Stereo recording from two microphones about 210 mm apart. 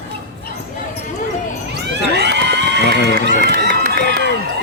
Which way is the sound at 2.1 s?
55° right (ahead or behind).